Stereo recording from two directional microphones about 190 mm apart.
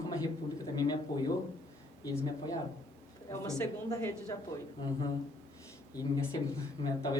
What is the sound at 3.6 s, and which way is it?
Speech, 15° left (ahead or behind).